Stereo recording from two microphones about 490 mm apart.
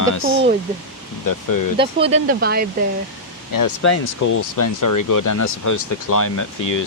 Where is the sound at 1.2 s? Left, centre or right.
Left.